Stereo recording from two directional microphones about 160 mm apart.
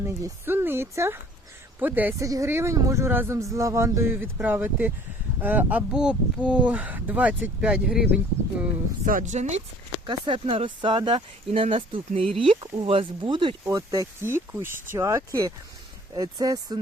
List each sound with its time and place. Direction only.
0.0 s speech: 15° right (ahead or behind)
9.0 s speech: 55° right (ahead or behind)
10.1 s speech: 30° right (ahead or behind)
13.7 s speech: 20° right (ahead or behind)